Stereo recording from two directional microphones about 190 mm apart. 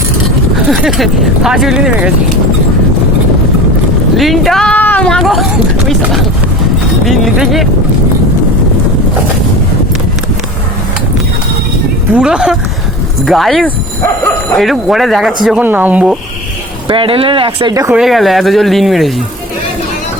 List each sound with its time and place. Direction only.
0.7 s speech: centre (ahead or behind)
4.2 s speech: centre (ahead or behind)
12.1 s speech: 5° right (ahead or behind)
16.9 s speech: 25° right (ahead or behind)
17.9 s speech: centre (ahead or behind)